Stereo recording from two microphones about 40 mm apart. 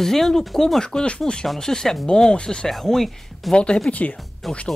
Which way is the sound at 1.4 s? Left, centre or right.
Centre.